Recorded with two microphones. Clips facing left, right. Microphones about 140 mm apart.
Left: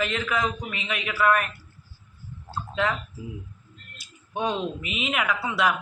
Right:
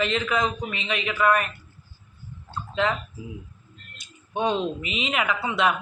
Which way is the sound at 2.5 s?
Centre (ahead or behind).